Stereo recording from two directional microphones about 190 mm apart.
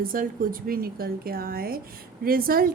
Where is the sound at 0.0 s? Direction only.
50° right (ahead or behind).